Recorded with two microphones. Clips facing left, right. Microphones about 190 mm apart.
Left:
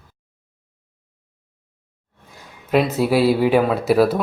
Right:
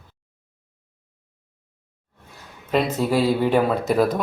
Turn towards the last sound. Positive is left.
turn(degrees=5)  # may be behind; listen again after turning